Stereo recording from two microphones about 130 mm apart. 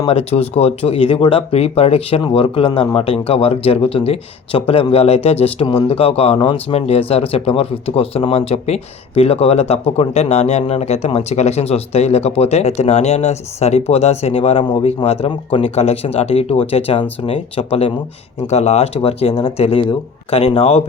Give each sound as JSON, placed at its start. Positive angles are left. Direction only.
{"t": 0.1, "sound": "speech", "side_deg": 50}
{"t": 5.6, "sound": "speech", "side_deg": 40}